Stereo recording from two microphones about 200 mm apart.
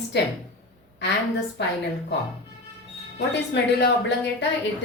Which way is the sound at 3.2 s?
60° left (ahead or behind).